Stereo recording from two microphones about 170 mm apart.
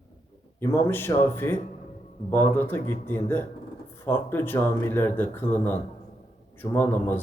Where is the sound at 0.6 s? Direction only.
15° left (ahead or behind).